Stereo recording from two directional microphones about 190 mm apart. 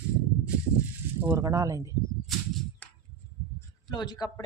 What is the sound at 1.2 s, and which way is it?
Speech, 10° right (ahead or behind).